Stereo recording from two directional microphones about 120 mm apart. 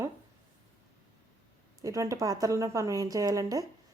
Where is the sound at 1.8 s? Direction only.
25° right (ahead or behind).